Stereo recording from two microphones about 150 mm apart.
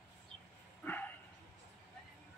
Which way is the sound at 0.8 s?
10° left (ahead or behind).